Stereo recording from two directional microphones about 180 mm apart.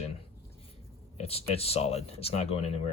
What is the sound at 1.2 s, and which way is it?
Speech, 35° left (ahead or behind).